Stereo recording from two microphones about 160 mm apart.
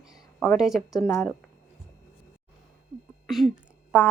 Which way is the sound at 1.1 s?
15° left (ahead or behind).